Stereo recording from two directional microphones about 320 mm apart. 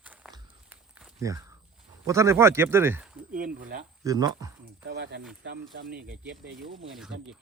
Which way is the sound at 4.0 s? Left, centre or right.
Centre.